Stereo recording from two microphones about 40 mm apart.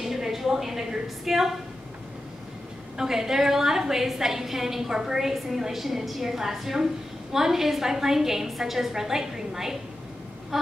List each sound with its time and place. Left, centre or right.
0.0 s a woman's voice: centre
3.0 s a woman's voice: centre
10.5 s quack: centre